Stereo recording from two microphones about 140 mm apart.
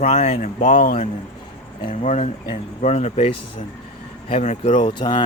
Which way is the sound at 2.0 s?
55° left (ahead or behind).